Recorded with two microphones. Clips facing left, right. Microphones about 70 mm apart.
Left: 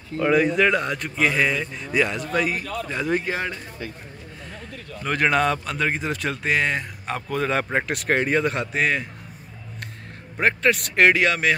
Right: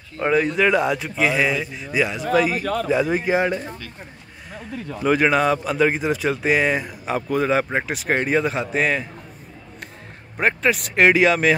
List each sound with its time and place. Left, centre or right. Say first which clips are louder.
0.3 s speech: right 1 dB; centre
2.6 s a man's voice: right 7 dB; right
2.9 s speech: right 5 dB; centre
5.0 s speech: right 3 dB; centre
10.3 s speech: even; centre